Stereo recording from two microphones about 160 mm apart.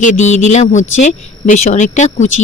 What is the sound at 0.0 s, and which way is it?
Speech, 50° left (ahead or behind).